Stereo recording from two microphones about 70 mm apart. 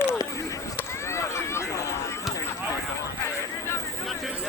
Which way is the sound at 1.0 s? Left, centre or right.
Left.